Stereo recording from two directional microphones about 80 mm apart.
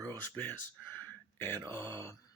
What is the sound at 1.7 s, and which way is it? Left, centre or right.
Speech, left.